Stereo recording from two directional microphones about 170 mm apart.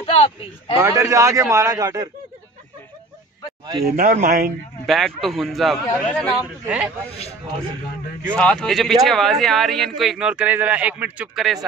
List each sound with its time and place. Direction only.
0.0 s speech: 35° left (ahead or behind)
0.7 s a man's voice: 20° right (ahead or behind)
3.8 s speech: 55° right (ahead or behind)
4.8 s a man's voice: centre (ahead or behind)
8.4 s a man's voice: 5° left (ahead or behind)